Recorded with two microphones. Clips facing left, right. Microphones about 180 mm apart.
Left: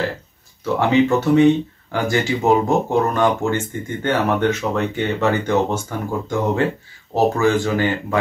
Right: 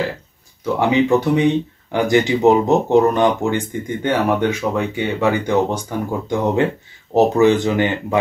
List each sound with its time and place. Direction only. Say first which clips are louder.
0.7 s speech: right 1 dB; 15° right (ahead or behind)